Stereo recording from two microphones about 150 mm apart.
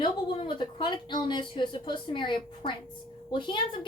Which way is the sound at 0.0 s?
35° left (ahead or behind).